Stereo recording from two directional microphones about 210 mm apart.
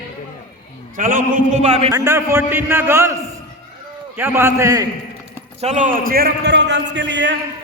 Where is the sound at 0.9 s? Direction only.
40° right (ahead or behind).